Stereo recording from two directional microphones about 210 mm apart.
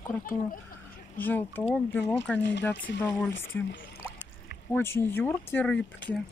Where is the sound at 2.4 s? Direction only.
55° left (ahead or behind).